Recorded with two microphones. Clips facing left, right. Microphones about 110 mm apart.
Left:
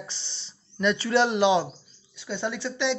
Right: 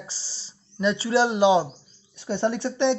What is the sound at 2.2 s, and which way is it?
Speech, 55° right (ahead or behind).